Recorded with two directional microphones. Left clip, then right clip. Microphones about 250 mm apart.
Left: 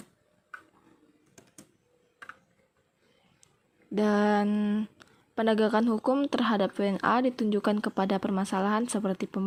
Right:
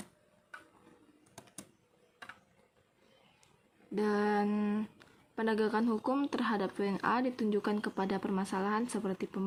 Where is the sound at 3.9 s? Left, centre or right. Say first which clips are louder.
Left 6 dB; left.